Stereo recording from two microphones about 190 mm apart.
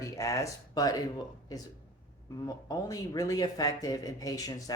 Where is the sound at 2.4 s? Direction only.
20° left (ahead or behind).